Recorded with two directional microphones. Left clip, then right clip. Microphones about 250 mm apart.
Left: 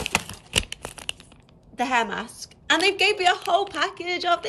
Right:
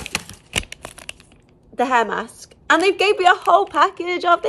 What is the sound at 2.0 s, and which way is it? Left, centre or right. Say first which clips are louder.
Speech: right 5 dB; right.